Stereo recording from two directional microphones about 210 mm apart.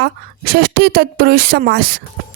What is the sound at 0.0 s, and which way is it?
A woman's voice, 50° right (ahead or behind).